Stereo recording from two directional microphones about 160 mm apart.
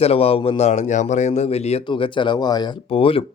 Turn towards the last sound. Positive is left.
turn(degrees=35)  # may be behind; listen again after turning